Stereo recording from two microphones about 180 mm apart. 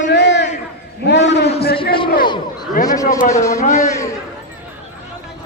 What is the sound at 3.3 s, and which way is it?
Speech, 15° left (ahead or behind).